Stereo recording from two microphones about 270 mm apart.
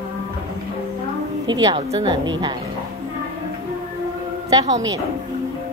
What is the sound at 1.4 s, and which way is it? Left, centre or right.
A woman's voice, centre.